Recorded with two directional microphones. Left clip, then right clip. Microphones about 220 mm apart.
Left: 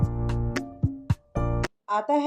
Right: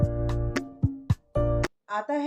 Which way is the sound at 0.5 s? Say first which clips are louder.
Even; centre (ahead or behind).